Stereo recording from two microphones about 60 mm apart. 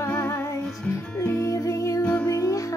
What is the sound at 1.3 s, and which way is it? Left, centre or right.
Music, left.